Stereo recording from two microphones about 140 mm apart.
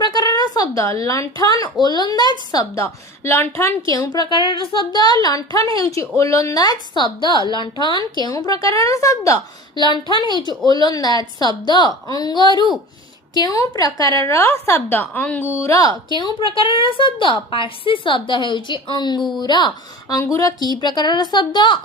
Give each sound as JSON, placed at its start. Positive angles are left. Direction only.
{"t": 0.0, "sound": "a woman's voice", "side_deg": 30}
{"t": 16.0, "sound": "a woman's voice", "side_deg": 35}